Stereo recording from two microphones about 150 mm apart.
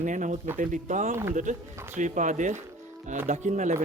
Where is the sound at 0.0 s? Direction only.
55° right (ahead or behind).